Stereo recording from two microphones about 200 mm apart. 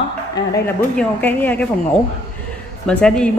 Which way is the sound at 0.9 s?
10° left (ahead or behind).